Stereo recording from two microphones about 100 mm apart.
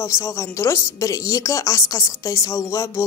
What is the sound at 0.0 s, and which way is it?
A woman's voice, 30° left (ahead or behind).